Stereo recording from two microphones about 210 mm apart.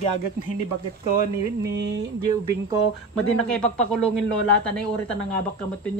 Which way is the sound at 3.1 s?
5° left (ahead or behind).